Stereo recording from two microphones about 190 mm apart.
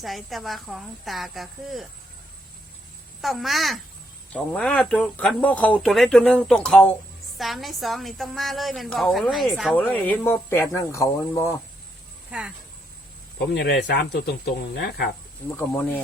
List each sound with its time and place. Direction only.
0.0 s speech: centre (ahead or behind)
3.2 s speech: centre (ahead or behind); by 11.5 s 15° left (ahead or behind)
12.3 s speech: 5° right (ahead or behind)
13.4 s speech: 60° left (ahead or behind)
15.4 s speech: 10° left (ahead or behind)